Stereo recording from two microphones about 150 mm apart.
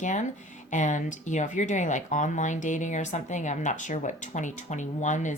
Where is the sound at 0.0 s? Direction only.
55° left (ahead or behind).